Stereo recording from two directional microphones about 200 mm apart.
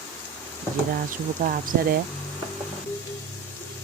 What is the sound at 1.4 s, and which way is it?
Speech, 45° right (ahead or behind).